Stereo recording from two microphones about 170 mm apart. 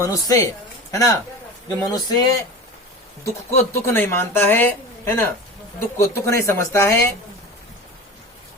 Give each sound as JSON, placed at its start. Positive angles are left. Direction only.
{"t": 0.1, "sound": "speech", "side_deg": 20}